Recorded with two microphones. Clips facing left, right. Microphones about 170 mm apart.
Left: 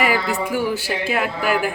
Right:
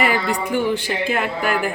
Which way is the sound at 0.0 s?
5° left (ahead or behind).